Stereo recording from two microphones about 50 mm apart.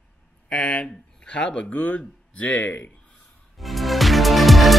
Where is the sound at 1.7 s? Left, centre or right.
Left.